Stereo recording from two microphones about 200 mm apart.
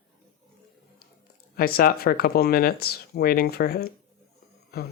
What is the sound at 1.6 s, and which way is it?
Speech, 50° left (ahead or behind).